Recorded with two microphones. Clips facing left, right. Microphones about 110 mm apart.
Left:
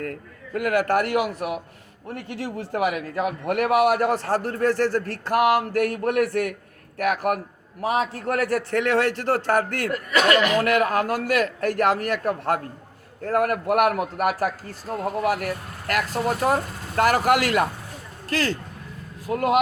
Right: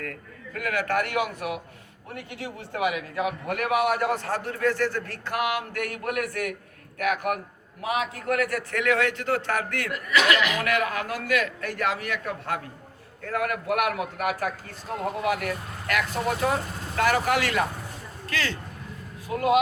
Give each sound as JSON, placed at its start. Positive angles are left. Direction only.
{"t": 0.5, "sound": "a man's voice", "side_deg": 50}
{"t": 19.3, "sound": "speech", "side_deg": 50}